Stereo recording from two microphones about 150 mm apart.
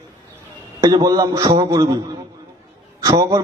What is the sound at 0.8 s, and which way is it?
A man's voice, 25° right (ahead or behind).